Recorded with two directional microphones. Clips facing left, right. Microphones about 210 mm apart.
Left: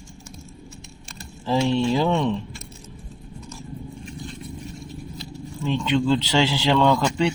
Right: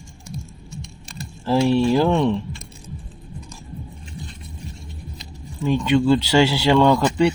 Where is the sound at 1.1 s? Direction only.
10° right (ahead or behind).